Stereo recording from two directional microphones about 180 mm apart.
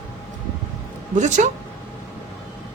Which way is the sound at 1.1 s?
40° right (ahead or behind).